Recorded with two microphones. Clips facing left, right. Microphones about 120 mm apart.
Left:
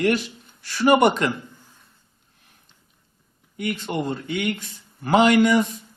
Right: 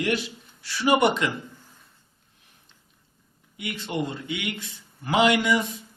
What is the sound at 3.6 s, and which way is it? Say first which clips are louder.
A man's voice: left 3 dB; 45° left (ahead or behind).